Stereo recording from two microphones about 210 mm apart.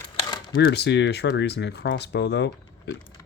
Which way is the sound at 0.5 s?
50° left (ahead or behind).